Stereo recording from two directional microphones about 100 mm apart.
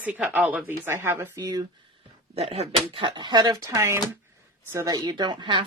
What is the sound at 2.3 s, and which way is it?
Speech, 90° right.